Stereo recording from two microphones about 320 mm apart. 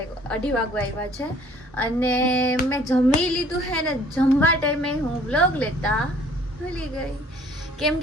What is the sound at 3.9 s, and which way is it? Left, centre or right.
A woman's voice, centre.